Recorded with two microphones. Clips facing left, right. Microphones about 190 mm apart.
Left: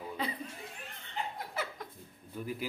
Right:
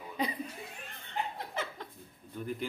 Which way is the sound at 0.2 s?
15° right (ahead or behind).